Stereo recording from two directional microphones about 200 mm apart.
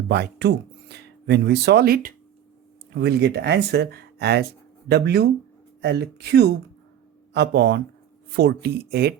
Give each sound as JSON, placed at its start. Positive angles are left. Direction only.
{"t": 0.1, "sound": "speech", "side_deg": -55}